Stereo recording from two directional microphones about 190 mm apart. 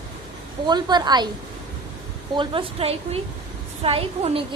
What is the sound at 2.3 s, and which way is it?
A woman's voice, 30° right (ahead or behind).